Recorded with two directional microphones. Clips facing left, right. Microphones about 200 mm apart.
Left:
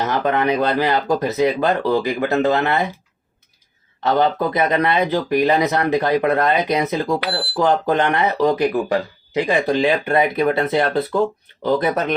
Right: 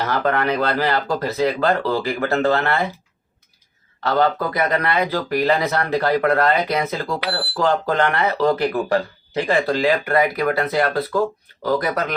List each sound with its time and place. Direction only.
0.0 s speech: 20° left (ahead or behind)
4.0 s speech: 20° left (ahead or behind)